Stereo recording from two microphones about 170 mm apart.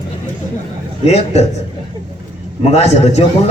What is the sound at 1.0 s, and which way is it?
Speech, 40° left (ahead or behind).